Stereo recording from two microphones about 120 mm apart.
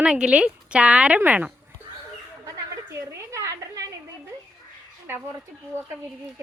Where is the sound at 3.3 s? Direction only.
25° right (ahead or behind).